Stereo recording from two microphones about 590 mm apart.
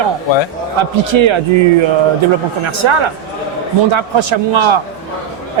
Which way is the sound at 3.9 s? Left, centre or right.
Right.